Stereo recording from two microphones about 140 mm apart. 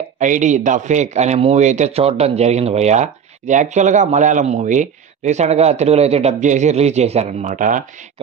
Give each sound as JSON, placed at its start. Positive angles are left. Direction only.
{"t": 0.2, "sound": "speech", "side_deg": -60}